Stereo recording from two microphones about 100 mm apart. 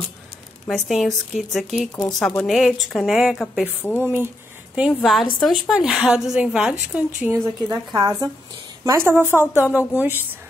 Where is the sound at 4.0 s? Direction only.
20° right (ahead or behind).